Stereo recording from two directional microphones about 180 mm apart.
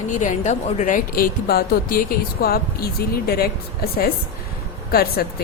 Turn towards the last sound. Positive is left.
turn(degrees=60)  # may be behind; listen again after turning